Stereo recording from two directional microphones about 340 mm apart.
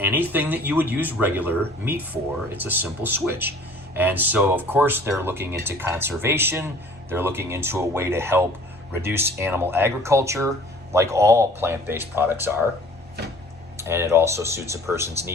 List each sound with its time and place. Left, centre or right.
0.0 s speech: centre
13.7 s speech: centre